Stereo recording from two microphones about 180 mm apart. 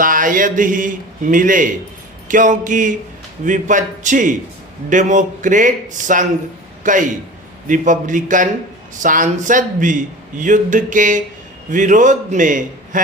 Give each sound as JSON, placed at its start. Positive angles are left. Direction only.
{"t": 0.0, "sound": "a man's voice", "side_deg": -50}